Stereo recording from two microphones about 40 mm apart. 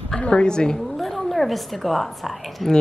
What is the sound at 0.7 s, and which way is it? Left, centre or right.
Speech, centre.